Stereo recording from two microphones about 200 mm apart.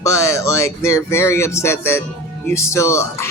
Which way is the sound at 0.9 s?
15° left (ahead or behind).